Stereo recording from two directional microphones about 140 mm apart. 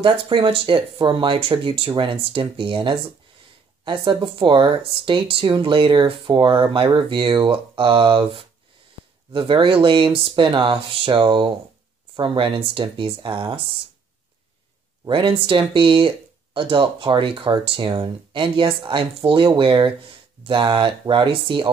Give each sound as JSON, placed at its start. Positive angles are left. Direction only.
{"t": 0.0, "sound": "speech", "side_deg": -35}
{"t": 15.0, "sound": "speech", "side_deg": -35}